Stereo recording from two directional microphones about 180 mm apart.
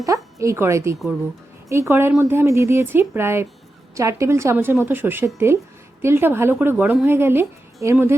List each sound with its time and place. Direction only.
0.0 s speech: 15° right (ahead or behind)